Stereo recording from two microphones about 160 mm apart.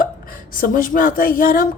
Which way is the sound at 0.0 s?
60° left (ahead or behind).